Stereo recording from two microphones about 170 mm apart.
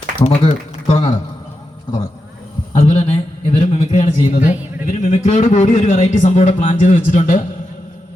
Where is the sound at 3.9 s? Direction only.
50° left (ahead or behind).